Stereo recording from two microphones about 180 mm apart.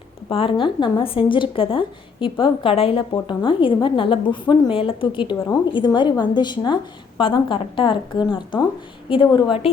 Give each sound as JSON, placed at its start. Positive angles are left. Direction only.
{"t": 0.3, "sound": "a woman's voice", "side_deg": 30}